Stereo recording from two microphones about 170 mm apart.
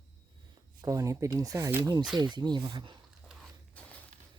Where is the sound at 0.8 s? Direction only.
20° right (ahead or behind).